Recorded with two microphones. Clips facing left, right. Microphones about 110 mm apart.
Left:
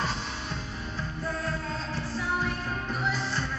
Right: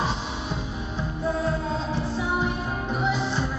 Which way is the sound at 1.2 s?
25° right (ahead or behind).